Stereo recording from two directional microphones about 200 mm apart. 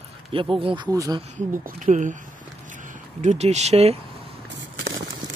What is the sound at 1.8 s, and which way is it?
Speech, 40° right (ahead or behind).